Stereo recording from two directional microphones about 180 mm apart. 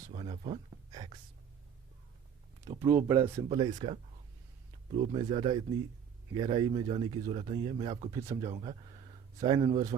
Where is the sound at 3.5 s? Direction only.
25° right (ahead or behind).